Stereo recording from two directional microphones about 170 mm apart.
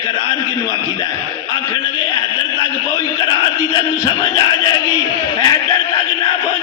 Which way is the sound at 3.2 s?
30° left (ahead or behind).